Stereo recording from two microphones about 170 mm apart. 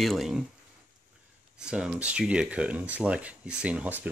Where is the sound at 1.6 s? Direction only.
5° right (ahead or behind).